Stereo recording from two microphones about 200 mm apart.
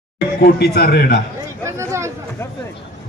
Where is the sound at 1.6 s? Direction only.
15° right (ahead or behind).